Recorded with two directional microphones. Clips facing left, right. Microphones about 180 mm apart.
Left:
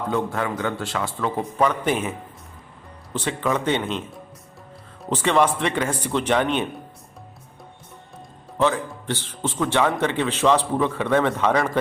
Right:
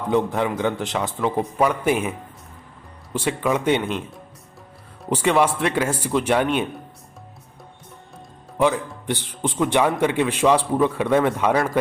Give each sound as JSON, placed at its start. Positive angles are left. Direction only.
{"t": 0.1, "sound": "a man's voice", "side_deg": -15}
{"t": 5.0, "sound": "a man's voice", "side_deg": -10}
{"t": 8.5, "sound": "a man's voice", "side_deg": -15}